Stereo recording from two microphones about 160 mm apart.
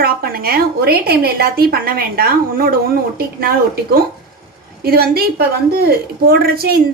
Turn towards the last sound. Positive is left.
turn(degrees=-70)  # may be behind; listen again after turning